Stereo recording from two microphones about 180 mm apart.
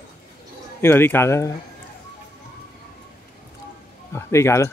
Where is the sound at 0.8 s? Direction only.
10° left (ahead or behind).